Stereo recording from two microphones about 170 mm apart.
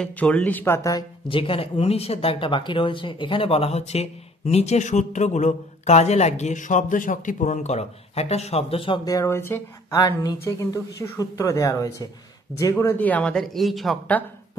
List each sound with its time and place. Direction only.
0.0 s speech: 10° left (ahead or behind)
1.3 s speech: 30° left (ahead or behind); by 14.6 s 10° left (ahead or behind)